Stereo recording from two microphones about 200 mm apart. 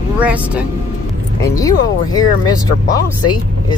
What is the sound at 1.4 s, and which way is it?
Speech, 15° left (ahead or behind).